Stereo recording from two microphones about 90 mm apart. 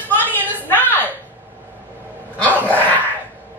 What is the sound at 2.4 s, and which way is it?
Dog, 15° left (ahead or behind).